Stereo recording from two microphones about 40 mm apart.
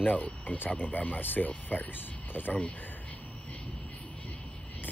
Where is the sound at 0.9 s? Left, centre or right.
Left.